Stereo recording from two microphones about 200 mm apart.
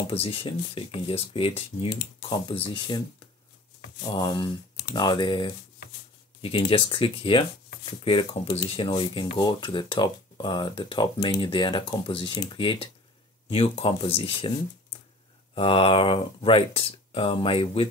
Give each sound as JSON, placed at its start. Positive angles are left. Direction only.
{"t": 0.0, "sound": "speech", "side_deg": 30}
{"t": 4.1, "sound": "speech", "side_deg": 20}